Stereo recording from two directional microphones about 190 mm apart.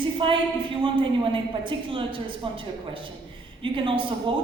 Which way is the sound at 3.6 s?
25° right (ahead or behind).